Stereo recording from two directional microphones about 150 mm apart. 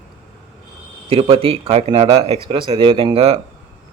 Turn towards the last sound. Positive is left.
turn(degrees=-40)  # may be behind; listen again after turning